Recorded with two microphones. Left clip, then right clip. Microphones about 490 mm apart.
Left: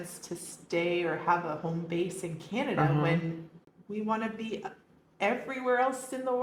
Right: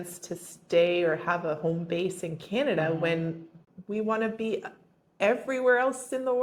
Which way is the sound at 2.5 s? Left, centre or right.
Right.